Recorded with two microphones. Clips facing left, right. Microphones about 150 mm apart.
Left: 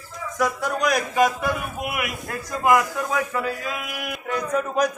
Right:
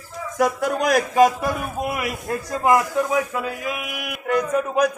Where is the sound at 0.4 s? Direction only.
55° right (ahead or behind).